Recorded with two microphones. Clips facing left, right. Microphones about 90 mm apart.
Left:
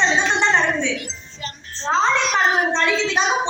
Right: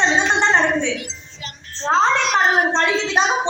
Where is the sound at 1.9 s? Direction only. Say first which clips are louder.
Right 2 dB; 50° right (ahead or behind).